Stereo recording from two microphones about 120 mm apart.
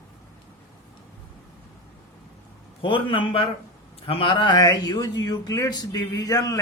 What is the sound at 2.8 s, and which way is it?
A man's voice, 45° left (ahead or behind).